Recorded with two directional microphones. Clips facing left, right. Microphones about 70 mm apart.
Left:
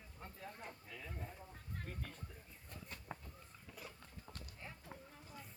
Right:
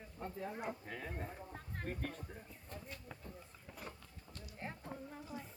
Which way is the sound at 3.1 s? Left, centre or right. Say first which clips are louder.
Left 4 dB; left.